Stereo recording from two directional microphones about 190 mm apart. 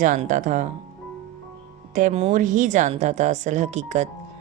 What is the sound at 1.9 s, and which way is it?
Speech, 40° right (ahead or behind).